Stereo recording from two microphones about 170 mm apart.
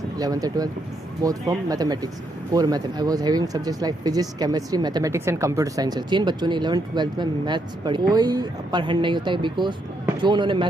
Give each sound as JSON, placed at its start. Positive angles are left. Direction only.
{"t": 0.2, "sound": "speech", "side_deg": -20}